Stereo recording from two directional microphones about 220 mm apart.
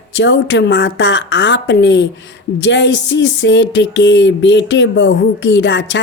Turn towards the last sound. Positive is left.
turn(degrees=55)  # may be behind; listen again after turning